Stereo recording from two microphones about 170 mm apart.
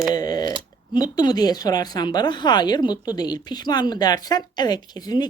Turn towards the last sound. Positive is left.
turn(degrees=25)  # may be behind; listen again after turning